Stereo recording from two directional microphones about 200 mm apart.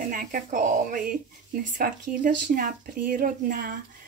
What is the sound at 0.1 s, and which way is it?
A woman's voice, 40° right (ahead or behind).